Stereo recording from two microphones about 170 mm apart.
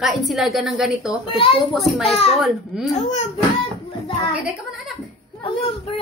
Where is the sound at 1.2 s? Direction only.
30° left (ahead or behind).